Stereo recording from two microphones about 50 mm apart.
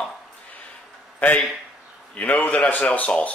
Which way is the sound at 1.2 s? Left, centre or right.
Left.